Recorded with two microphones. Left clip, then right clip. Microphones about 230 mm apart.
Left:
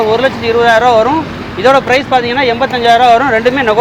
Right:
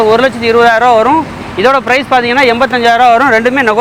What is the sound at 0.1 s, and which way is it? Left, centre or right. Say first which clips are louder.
Speech: right 3 dB; right.